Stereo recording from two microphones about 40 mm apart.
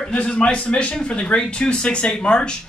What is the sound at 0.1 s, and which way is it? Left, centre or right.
A man's voice, left.